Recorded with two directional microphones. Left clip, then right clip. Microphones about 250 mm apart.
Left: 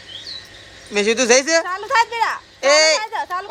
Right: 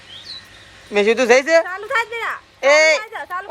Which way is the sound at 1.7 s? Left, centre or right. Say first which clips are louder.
Left 3 dB; left.